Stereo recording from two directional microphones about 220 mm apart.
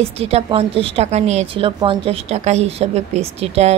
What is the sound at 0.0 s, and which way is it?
A woman's voice, 30° right (ahead or behind).